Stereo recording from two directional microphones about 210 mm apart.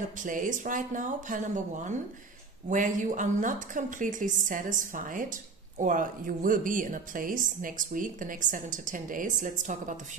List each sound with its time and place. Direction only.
0.2 s speech: 40° right (ahead or behind)